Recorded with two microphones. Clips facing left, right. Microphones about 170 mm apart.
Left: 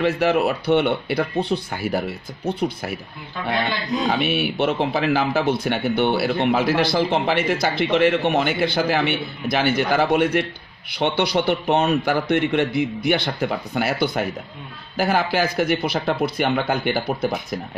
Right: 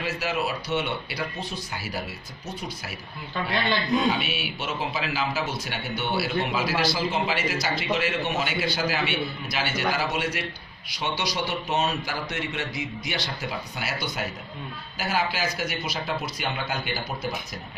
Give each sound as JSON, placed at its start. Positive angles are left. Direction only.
{"t": 0.0, "sound": "speech", "side_deg": 60}
{"t": 4.1, "sound": "speech", "side_deg": 55}